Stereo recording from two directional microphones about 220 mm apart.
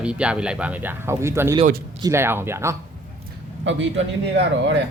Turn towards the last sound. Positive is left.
turn(degrees=-55)  # may be behind; listen again after turning